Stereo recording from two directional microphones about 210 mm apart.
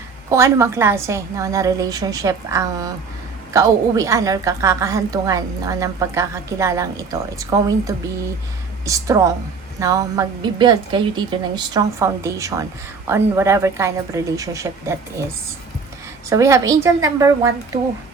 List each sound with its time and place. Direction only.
0.3 s a woman's voice: 15° right (ahead or behind)
16.3 s a woman's voice: 15° right (ahead or behind)